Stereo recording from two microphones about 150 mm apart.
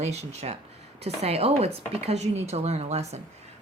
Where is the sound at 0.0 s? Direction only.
45° right (ahead or behind).